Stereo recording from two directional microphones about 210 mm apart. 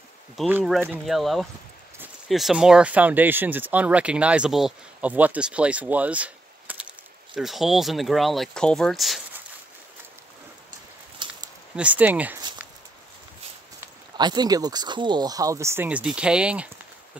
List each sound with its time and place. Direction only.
0.4 s speech: 5° right (ahead or behind)
11.2 s a sound: 20° right (ahead or behind)
11.7 s speech: 5° right (ahead or behind)
14.1 s speech: 20° right (ahead or behind); by 16.6 s 5° right (ahead or behind)